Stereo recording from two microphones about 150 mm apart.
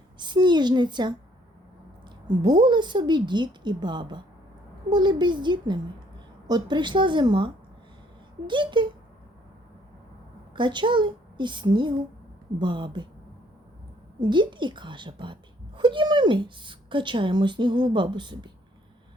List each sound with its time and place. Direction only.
0.2 s a woman's voice: 30° right (ahead or behind)
2.2 s a woman's voice: 30° right (ahead or behind)
10.5 s a woman's voice: 30° right (ahead or behind)
14.2 s speech: 30° right (ahead or behind)